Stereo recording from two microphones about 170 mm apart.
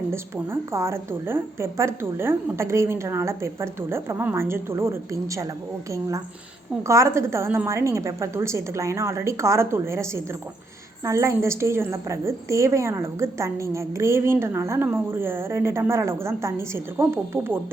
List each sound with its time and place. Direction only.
0.1 s a woman's voice: 15° right (ahead or behind)